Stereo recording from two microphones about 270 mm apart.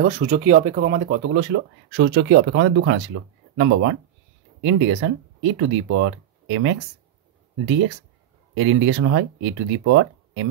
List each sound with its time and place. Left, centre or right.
0.0 s speech: right
8.5 s speech: right